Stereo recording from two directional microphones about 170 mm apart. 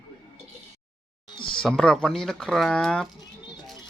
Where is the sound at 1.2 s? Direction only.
30° left (ahead or behind).